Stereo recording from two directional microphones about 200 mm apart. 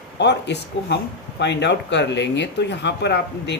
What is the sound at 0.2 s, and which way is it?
Speech, 60° left (ahead or behind).